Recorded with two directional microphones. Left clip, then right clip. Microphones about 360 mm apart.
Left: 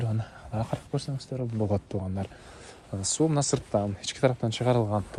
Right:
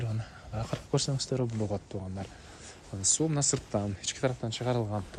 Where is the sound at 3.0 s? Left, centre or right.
Centre.